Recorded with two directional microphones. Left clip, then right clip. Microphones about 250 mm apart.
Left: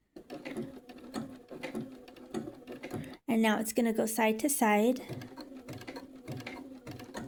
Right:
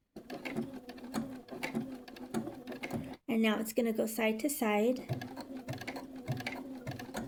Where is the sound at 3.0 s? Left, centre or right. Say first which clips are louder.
Left 4 dB; left.